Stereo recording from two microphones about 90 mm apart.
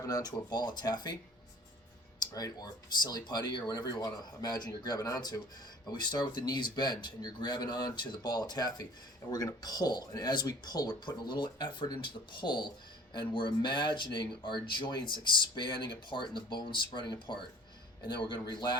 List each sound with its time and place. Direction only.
0.0 s speech: 45° left (ahead or behind)